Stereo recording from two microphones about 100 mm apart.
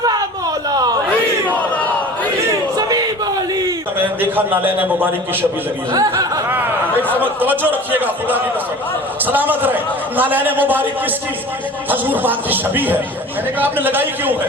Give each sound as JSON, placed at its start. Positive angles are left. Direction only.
{"t": 0.7, "sound": "a sound", "side_deg": -40}
{"t": 2.7, "sound": "a sound", "side_deg": -40}
{"t": 3.9, "sound": "a man's voice", "side_deg": -20}
{"t": 5.9, "sound": "speech", "side_deg": -35}
{"t": 7.1, "sound": "a man's voice", "side_deg": -20}
{"t": 11.9, "sound": "a man's voice", "side_deg": -20}